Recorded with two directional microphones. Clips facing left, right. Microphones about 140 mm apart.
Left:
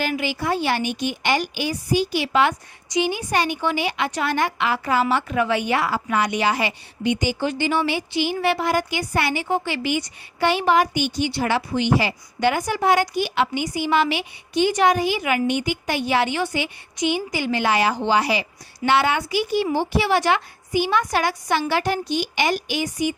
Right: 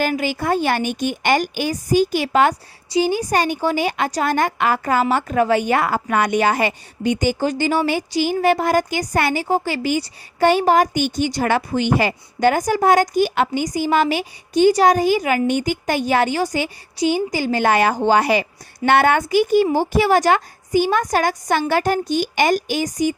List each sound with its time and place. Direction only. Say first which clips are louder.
0.0 s a woman's voice: right 4 dB; 45° right (ahead or behind)